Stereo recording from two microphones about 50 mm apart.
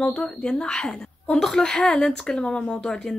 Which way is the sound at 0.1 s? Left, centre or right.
Centre.